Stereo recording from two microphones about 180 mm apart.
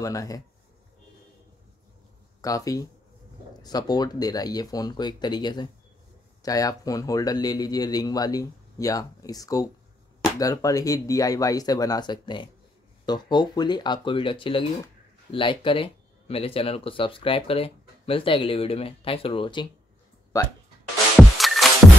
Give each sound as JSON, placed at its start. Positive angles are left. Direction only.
{"t": 0.0, "sound": "speech", "side_deg": 20}
{"t": 2.4, "sound": "speech", "side_deg": 20}
{"t": 21.2, "sound": "music", "side_deg": 0}